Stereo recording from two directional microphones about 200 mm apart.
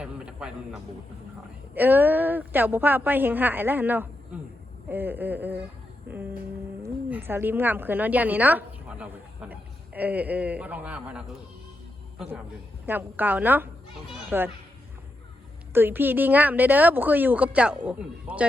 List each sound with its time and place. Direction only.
0.0 s a sound: 5° right (ahead or behind)
1.7 s a woman's voice: 10° right (ahead or behind)
6.1 s music: 50° right (ahead or behind)
6.8 s a woman's voice: 10° right (ahead or behind)
12.8 s a woman's voice: 10° right (ahead or behind)
15.7 s a woman's voice: 10° right (ahead or behind)